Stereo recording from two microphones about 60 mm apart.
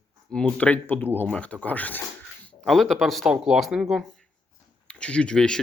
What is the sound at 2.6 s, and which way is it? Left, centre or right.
Speech, centre.